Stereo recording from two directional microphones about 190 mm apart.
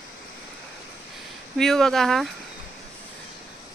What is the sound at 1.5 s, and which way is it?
Speech, centre (ahead or behind).